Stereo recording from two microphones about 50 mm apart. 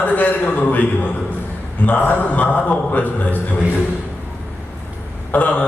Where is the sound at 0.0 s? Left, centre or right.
Left.